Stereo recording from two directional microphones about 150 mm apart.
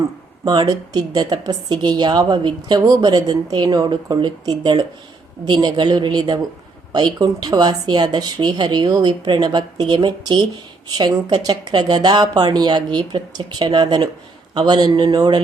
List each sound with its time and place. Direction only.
0.4 s a woman's voice: 30° right (ahead or behind)